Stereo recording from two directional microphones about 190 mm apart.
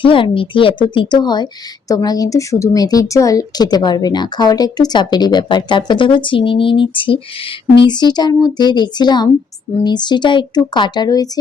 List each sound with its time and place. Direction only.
0.0 s speech: 25° left (ahead or behind)